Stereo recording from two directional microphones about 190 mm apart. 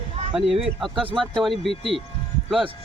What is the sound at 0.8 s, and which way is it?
Speech, centre (ahead or behind).